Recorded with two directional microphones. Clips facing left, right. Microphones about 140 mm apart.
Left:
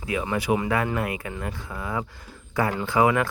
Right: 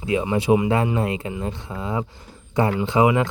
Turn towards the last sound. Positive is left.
turn(degrees=-20)  # may be behind; listen again after turning